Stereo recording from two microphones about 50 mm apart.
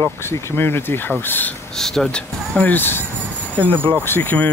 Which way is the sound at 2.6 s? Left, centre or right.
Left.